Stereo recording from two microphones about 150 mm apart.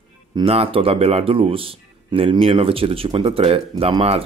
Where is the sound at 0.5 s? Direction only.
40° right (ahead or behind).